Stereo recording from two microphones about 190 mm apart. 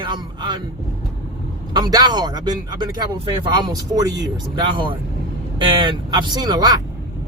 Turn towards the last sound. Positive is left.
turn(degrees=-20)  # may be behind; listen again after turning